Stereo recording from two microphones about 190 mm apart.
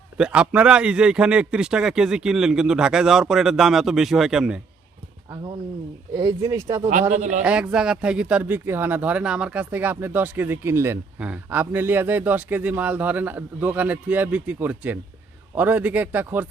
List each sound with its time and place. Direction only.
0.2 s a man's voice: 5° right (ahead or behind)
6.1 s speech: 20° right (ahead or behind)
7.1 s a man's voice: 40° right (ahead or behind)
7.4 s speech: 5° right (ahead or behind)